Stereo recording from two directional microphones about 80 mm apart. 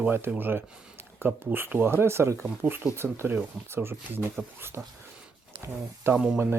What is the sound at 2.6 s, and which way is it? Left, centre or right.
Speech, right.